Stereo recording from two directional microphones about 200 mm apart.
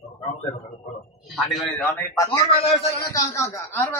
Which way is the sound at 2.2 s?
25° left (ahead or behind).